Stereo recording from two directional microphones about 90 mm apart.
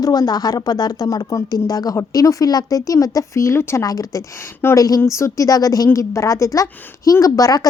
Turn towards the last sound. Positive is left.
turn(degrees=40)  # may be behind; listen again after turning